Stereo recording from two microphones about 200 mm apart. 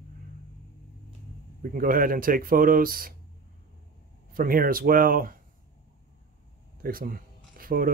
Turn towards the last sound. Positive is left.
turn(degrees=-45)  # may be behind; listen again after turning